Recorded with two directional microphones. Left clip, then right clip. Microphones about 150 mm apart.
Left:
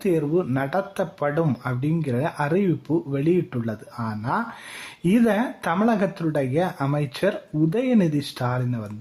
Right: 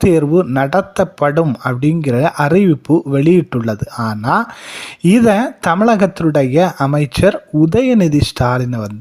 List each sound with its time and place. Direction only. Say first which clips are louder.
0.0 s speech: right 10 dB; 40° right (ahead or behind)